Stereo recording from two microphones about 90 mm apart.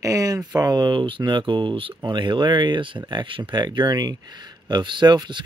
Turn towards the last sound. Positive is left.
turn(degrees=-55)  # may be behind; listen again after turning